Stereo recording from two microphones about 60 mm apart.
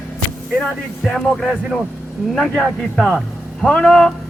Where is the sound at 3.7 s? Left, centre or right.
Centre.